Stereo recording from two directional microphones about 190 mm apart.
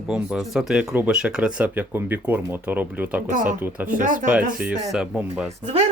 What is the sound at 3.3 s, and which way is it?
Speech, 45° right (ahead or behind).